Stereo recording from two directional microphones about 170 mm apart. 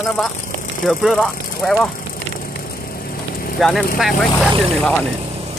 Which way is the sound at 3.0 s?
60° left (ahead or behind).